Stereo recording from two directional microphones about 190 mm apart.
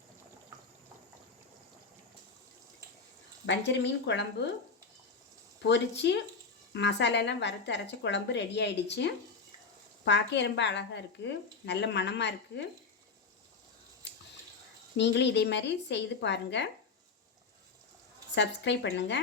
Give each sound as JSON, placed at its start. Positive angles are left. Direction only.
{"t": 3.4, "sound": "speech", "side_deg": 65}
{"t": 5.6, "sound": "a woman's voice", "side_deg": 65}
{"t": 14.9, "sound": "a woman's voice", "side_deg": 65}
{"t": 18.3, "sound": "a woman's voice", "side_deg": 65}